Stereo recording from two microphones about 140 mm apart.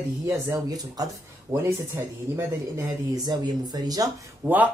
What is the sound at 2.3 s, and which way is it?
Speech, 25° right (ahead or behind).